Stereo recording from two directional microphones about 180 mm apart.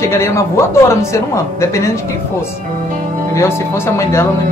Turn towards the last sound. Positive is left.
turn(degrees=15)  # may be behind; listen again after turning